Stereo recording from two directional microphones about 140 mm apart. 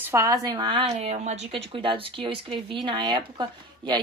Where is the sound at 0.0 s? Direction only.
20° right (ahead or behind).